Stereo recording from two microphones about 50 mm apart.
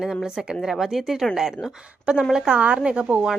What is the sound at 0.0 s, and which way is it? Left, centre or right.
A woman's voice, centre.